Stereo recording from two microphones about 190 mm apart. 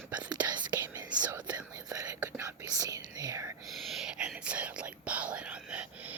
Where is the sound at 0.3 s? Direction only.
20° right (ahead or behind).